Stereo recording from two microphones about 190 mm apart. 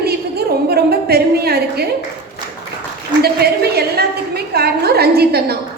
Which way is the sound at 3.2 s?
55° right (ahead or behind).